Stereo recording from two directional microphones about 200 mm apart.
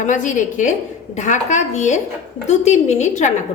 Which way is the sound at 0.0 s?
40° left (ahead or behind).